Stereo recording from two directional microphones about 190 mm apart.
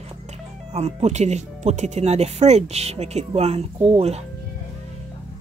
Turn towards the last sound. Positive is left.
turn(degrees=-30)  # may be behind; listen again after turning